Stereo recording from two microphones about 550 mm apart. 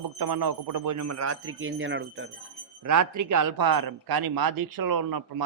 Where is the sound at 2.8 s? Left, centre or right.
Right.